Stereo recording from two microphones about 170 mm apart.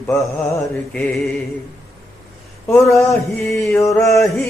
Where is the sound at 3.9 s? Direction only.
Centre (ahead or behind).